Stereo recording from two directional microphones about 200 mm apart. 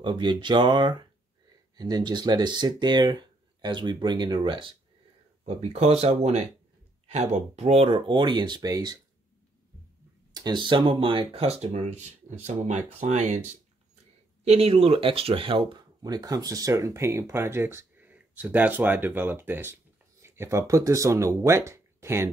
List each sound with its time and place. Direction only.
0.0 s speech: 25° right (ahead or behind)
10.3 s speech: 20° right (ahead or behind)
14.4 s speech: 30° right (ahead or behind); by 22.3 s 15° right (ahead or behind)